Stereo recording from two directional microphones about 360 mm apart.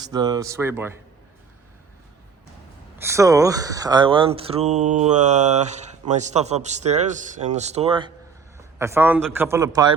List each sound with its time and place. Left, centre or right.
0.0 s speech: centre
3.0 s a man's voice: centre